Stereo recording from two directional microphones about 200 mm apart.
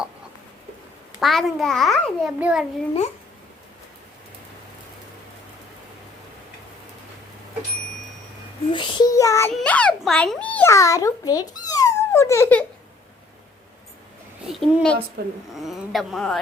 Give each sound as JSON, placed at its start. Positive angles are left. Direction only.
{"t": 1.2, "sound": "a child's voice", "side_deg": 0}
{"t": 8.7, "sound": "child singing", "side_deg": 20}
{"t": 9.5, "sound": "a child's voice", "side_deg": 5}
{"t": 14.4, "sound": "a woman's voice", "side_deg": 0}
{"t": 15.2, "sound": "speech", "side_deg": -50}
{"t": 15.6, "sound": "a child's voice", "side_deg": 0}